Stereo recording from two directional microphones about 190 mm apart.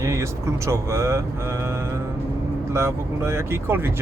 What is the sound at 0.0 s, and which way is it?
Speech, 15° right (ahead or behind).